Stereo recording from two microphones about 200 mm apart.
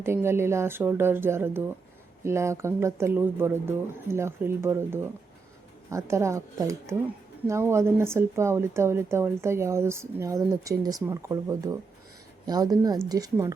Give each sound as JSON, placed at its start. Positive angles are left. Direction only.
{"t": 0.0, "sound": "a woman's voice", "side_deg": -10}